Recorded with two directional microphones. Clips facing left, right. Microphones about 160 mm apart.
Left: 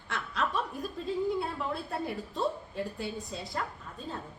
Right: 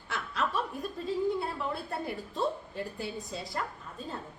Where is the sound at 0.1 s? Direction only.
Centre (ahead or behind).